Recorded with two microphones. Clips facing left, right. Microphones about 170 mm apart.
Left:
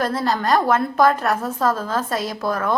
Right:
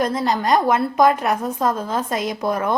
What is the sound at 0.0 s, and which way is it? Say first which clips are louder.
A woman's voice: right 1 dB; 15° right (ahead or behind).